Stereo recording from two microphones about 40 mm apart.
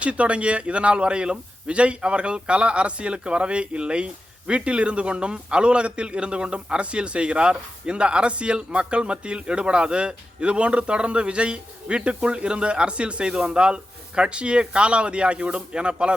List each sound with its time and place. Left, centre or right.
0.0 s speech: right
13.3 s speech: centre